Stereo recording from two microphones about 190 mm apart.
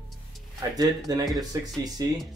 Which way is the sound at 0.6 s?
20° right (ahead or behind).